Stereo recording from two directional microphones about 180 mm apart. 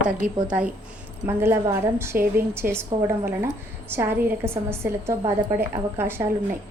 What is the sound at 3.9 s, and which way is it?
A woman's voice, 10° right (ahead or behind).